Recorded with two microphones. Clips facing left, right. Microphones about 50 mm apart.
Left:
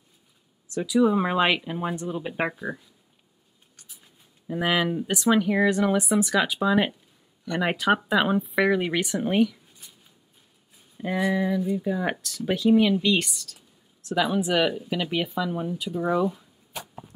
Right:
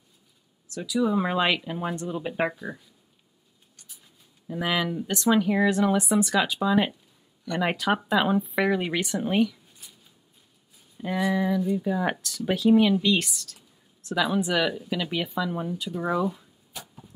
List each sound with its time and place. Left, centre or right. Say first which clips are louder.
1.0 s speech: left 1 dB; centre
4.5 s speech: left 3 dB; centre
5.1 s speech: even; centre
6.6 s speech: left 1 dB; centre
7.4 s speech: left 2 dB; centre
11.0 s speech: left 1 dB; centre